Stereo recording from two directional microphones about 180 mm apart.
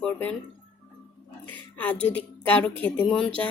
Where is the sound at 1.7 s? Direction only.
10° left (ahead or behind).